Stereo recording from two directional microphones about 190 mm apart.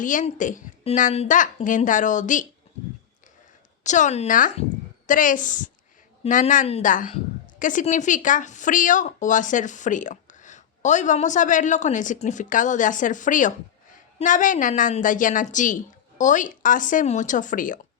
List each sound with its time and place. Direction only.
0.0 s a woman's voice: 45° left (ahead or behind)
3.8 s a woman's voice: 40° left (ahead or behind)